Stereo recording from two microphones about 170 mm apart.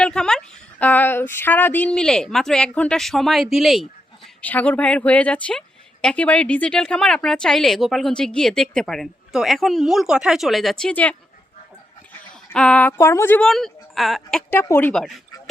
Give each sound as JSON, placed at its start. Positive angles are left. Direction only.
{"t": 0.0, "sound": "a woman's voice", "side_deg": 5}
{"t": 12.2, "sound": "a woman's voice", "side_deg": 5}